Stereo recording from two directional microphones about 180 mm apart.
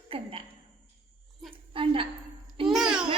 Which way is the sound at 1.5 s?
30° right (ahead or behind).